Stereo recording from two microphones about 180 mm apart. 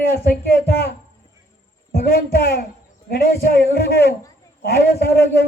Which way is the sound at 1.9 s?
55° left (ahead or behind).